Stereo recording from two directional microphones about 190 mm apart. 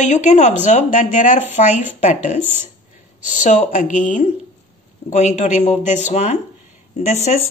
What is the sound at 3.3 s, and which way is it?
A woman's voice, 40° left (ahead or behind).